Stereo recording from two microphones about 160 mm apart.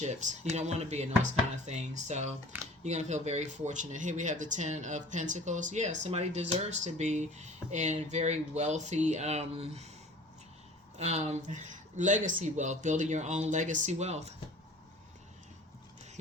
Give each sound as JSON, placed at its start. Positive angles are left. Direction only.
{"t": 0.0, "sound": "speech", "side_deg": -45}
{"t": 10.9, "sound": "speech", "side_deg": -45}